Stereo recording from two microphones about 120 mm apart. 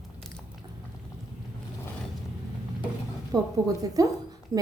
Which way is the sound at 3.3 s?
30° right (ahead or behind).